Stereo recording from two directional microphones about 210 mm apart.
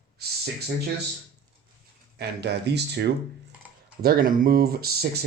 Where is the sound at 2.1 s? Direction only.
50° right (ahead or behind).